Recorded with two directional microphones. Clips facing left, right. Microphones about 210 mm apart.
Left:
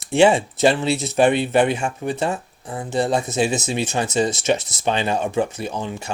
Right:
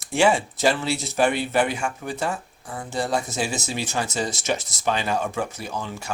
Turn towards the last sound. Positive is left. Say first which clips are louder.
# left 5 dB
turn(degrees=20)  # may be behind; listen again after turning